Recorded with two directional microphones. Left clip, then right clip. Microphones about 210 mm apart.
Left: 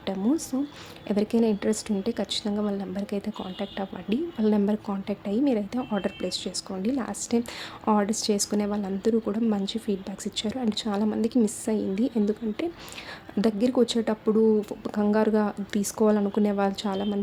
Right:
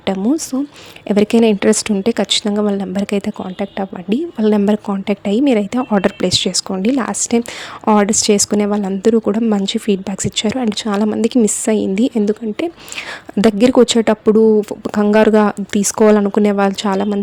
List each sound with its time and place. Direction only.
0.2 s a woman's voice: 30° right (ahead or behind)